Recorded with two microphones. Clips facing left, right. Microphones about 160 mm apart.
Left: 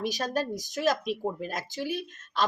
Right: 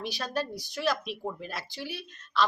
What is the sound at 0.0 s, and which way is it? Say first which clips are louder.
A woman's voice: left 3 dB; 45° left (ahead or behind).